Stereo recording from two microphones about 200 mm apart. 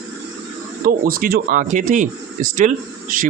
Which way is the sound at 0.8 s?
45° right (ahead or behind).